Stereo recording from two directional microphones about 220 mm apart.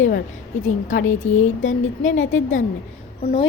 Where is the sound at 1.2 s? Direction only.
35° left (ahead or behind).